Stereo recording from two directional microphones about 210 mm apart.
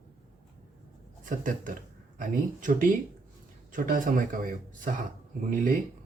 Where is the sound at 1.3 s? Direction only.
40° right (ahead or behind).